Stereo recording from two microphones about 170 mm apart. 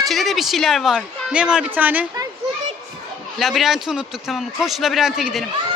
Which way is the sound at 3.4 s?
Centre (ahead or behind).